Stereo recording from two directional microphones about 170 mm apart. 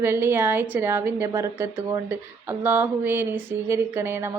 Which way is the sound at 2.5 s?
10° right (ahead or behind).